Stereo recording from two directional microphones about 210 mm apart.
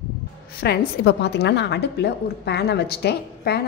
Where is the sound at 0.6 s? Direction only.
55° left (ahead or behind).